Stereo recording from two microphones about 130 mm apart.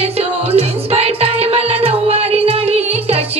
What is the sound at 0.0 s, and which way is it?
Music, 55° right (ahead or behind).